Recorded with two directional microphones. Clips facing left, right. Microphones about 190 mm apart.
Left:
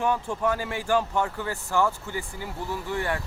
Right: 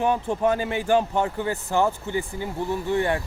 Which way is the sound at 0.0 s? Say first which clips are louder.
Right 4 dB; 20° right (ahead or behind).